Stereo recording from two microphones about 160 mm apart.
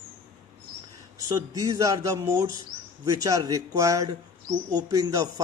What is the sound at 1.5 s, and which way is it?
A man's voice, 20° right (ahead or behind).